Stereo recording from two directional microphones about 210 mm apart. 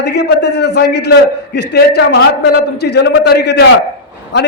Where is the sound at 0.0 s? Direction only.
55° left (ahead or behind).